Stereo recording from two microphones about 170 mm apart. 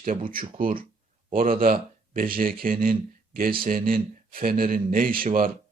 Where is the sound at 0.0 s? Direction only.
55° right (ahead or behind).